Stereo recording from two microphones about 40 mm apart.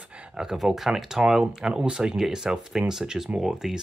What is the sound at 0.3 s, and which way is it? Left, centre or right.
Speech, centre.